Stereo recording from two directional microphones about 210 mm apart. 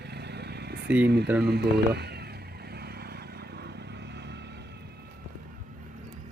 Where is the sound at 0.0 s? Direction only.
50° right (ahead or behind).